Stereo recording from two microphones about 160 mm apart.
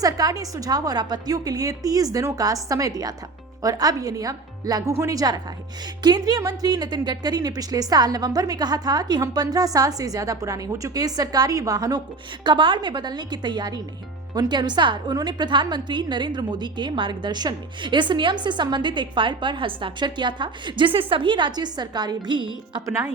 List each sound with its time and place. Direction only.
0.0 s a woman's voice: 20° right (ahead or behind)